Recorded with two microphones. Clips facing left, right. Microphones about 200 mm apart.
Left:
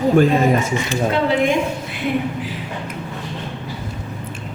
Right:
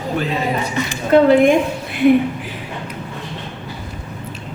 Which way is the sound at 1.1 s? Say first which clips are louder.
Right 11 dB; 50° right (ahead or behind).